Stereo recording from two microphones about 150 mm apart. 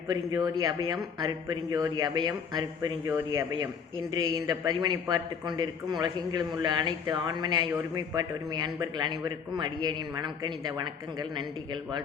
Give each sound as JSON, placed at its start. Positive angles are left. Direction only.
{"t": 0.1, "sound": "speech", "side_deg": -25}